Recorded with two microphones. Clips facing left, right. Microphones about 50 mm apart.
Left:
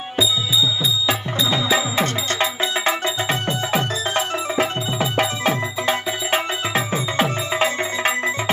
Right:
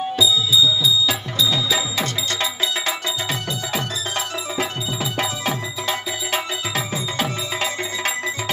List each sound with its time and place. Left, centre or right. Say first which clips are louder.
0.2 s music: right 1 dB; left